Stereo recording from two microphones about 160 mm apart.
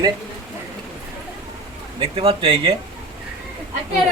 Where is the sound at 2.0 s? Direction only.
35° right (ahead or behind).